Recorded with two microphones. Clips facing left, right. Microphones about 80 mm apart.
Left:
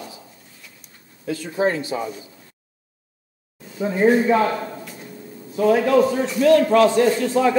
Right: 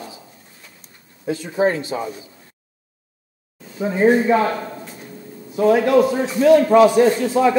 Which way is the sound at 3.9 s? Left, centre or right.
Centre.